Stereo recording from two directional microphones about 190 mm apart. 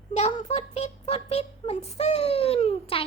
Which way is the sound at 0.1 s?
35° left (ahead or behind).